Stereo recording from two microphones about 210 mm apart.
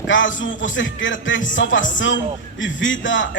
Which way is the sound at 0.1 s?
65° left (ahead or behind).